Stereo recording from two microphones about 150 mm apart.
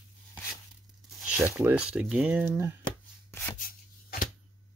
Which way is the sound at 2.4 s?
15° right (ahead or behind).